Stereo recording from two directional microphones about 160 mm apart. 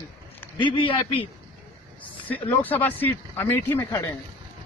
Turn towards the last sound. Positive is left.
turn(degrees=15)  # may be behind; listen again after turning